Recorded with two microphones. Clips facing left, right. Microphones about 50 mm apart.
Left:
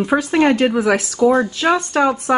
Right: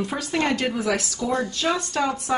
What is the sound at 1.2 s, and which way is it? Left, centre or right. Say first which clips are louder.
Speech: left 11 dB; left.